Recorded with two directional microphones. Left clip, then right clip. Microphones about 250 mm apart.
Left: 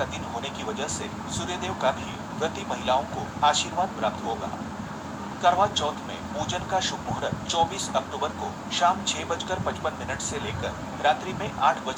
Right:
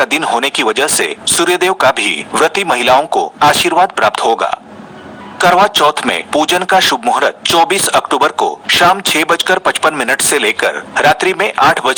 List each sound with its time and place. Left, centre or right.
0.0 s speech: right
5.4 s speech: right